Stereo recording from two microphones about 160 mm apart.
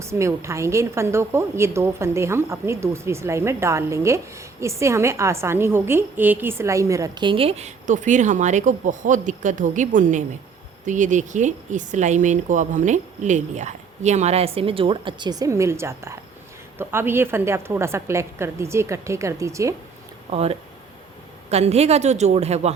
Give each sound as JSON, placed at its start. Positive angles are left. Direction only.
{"t": 0.0, "sound": "a woman's voice", "side_deg": -15}
{"t": 20.3, "sound": "a woman's voice", "side_deg": -40}